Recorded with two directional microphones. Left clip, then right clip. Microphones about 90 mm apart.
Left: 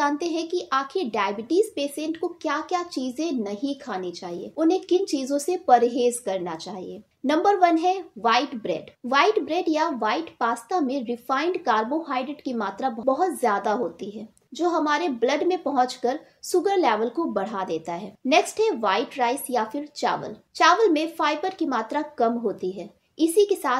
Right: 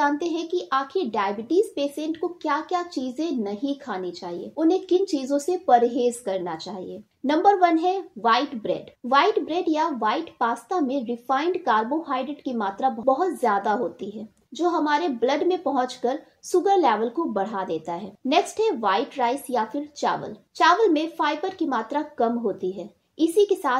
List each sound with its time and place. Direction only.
0.0 s speech: 30° right (ahead or behind)